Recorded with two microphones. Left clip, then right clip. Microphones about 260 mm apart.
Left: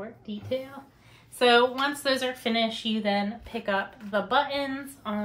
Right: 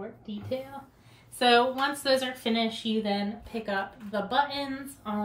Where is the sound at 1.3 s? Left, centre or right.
Centre.